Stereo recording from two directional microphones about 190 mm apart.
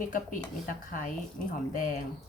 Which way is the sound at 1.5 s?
40° left (ahead or behind).